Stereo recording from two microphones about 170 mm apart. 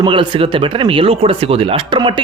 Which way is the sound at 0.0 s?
30° right (ahead or behind).